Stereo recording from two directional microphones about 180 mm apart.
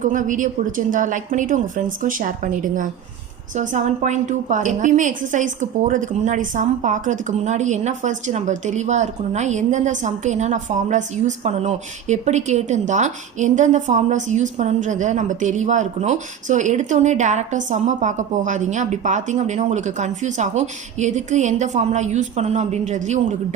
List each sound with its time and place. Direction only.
0.0 s a woman's voice: 45° right (ahead or behind)